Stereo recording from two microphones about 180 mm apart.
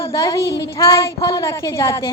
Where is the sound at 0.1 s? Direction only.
15° left (ahead or behind).